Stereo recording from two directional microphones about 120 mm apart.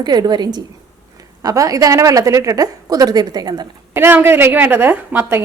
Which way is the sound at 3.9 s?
20° right (ahead or behind).